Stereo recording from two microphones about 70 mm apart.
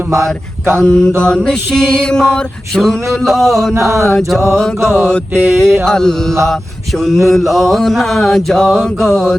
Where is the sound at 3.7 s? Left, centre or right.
Right.